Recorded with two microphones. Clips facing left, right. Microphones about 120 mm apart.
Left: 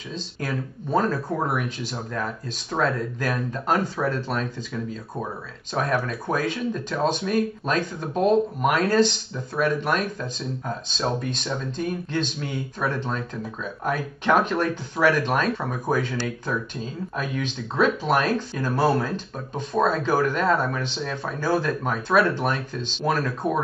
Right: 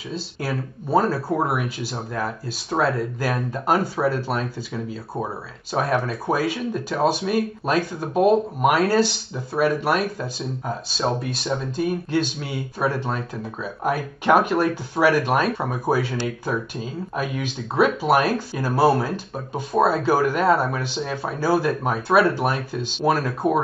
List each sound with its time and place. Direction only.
0.1 s speech: 10° right (ahead or behind)
5.7 s speech: 20° right (ahead or behind)
6.0 s speech: 10° right (ahead or behind)